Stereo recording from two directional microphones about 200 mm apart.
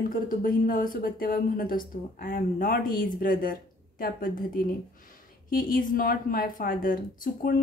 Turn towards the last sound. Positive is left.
turn(degrees=45)  # may be behind; listen again after turning